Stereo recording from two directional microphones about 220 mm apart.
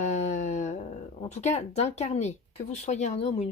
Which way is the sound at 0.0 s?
30° left (ahead or behind).